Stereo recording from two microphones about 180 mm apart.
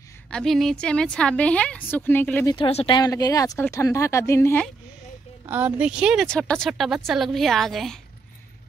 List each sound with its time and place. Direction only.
0.3 s a woman's voice: centre (ahead or behind)
2.5 s speech: 30° left (ahead or behind); by 4.6 s 15° left (ahead or behind)
5.5 s a woman's voice: 10° right (ahead or behind)